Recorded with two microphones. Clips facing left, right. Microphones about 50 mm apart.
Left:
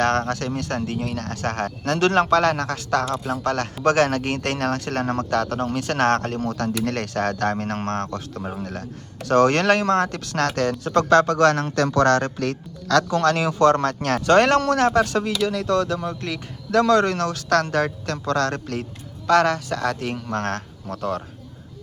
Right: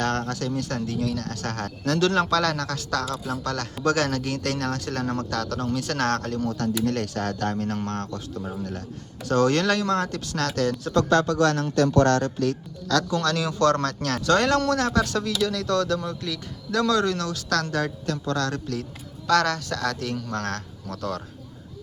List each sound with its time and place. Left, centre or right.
0.0 s speech: left
16.2 s speech: left
19.3 s speech: left